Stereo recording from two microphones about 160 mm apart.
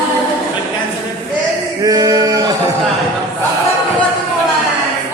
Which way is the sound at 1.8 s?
25° right (ahead or behind).